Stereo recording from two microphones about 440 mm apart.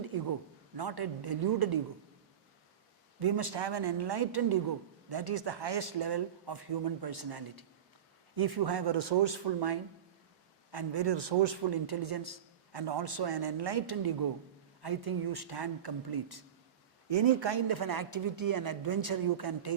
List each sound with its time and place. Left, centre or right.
0.8 s a man's voice: right
3.2 s a man's voice: right
17.1 s a man's voice: right